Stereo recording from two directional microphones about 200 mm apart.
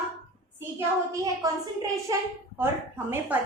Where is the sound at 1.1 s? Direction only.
15° right (ahead or behind).